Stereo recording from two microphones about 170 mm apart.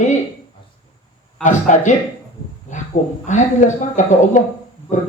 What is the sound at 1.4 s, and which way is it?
Speech, 45° left (ahead or behind).